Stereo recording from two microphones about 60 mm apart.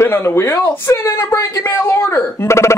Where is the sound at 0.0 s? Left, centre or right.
Left.